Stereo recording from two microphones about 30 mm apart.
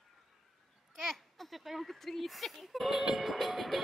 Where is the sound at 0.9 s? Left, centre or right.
Centre.